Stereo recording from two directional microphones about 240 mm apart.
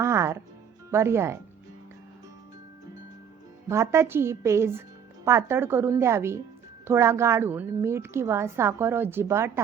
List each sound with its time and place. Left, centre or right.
0.0 s music: centre
0.9 s a woman's voice: centre
3.7 s a woman's voice: centre